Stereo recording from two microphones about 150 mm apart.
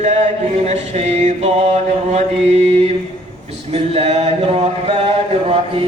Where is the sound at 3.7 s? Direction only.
45° right (ahead or behind).